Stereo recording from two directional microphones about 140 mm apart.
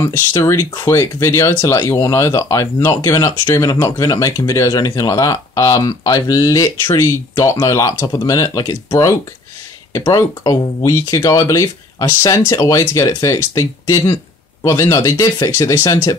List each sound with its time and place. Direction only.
0.3 s speech: 25° left (ahead or behind)